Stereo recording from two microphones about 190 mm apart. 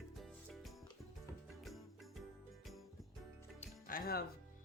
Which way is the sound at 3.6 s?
50° left (ahead or behind).